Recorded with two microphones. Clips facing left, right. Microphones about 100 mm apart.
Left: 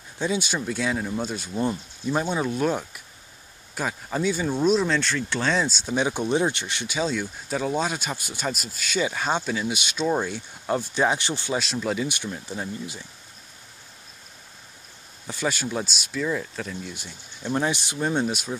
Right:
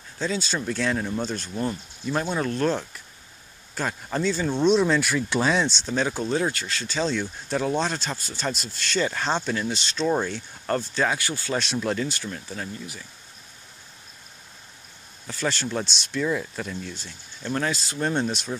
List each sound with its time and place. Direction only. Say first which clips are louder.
0.2 s speech: left 1 dB; 15° left (ahead or behind); by 5.6 s 10° right (ahead or behind)
5.6 s speech: even; 5° left (ahead or behind)
7.0 s speech: even; 5° left (ahead or behind); by 11.5 s 25° left (ahead or behind)
11.5 s speech: right 1 dB; centre (ahead or behind)
12.1 s speech: left 1 dB; 20° left (ahead or behind)
15.2 s speech: even; 10° left (ahead or behind)
16.9 s speech: even; 15° left (ahead or behind)
17.9 s speech: left 1 dB; 10° left (ahead or behind)